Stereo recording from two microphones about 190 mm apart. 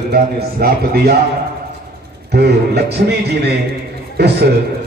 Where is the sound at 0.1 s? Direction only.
55° right (ahead or behind).